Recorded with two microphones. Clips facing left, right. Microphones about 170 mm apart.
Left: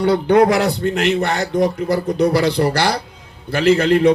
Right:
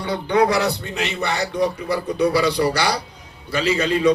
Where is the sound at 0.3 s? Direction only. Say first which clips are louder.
Left 2 dB; 50° left (ahead or behind).